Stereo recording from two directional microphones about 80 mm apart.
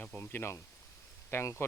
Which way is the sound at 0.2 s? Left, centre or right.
Left.